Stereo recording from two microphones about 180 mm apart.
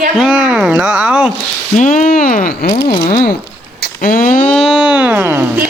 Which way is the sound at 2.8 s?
25° left (ahead or behind).